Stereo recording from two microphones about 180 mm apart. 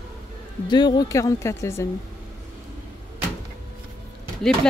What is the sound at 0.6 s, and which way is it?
Speech, 25° left (ahead or behind).